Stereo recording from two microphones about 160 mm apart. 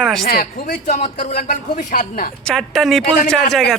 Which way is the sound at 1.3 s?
60° left (ahead or behind).